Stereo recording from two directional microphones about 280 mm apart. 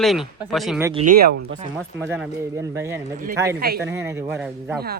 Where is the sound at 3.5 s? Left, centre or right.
Right.